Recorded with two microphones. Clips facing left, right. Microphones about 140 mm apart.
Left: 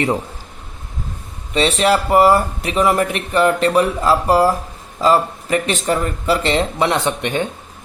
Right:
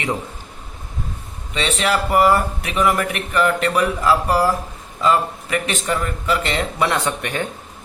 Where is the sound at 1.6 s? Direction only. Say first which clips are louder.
Left 5 dB; 35° left (ahead or behind).